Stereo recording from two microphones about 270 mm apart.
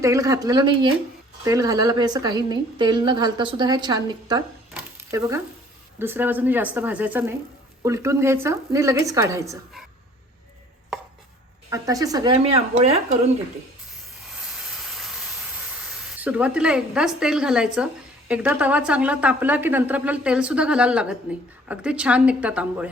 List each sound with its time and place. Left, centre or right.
0.0 s a woman's voice: centre
4.7 s a sound: centre
6.0 s a woman's voice: centre
11.7 s a woman's voice: centre
14.3 s steam: centre
18.3 s a woman's voice: centre